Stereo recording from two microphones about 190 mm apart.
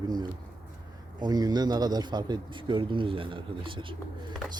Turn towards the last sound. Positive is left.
turn(degrees=-25)  # may be behind; listen again after turning